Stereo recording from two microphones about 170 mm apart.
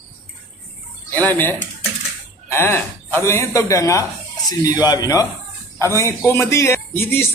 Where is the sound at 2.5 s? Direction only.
15° left (ahead or behind).